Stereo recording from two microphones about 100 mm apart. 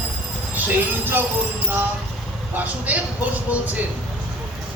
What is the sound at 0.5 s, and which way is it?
Speech, 20° right (ahead or behind).